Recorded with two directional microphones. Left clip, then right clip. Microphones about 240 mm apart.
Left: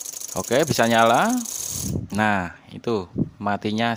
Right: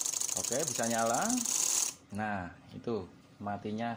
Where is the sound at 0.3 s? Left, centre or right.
Left.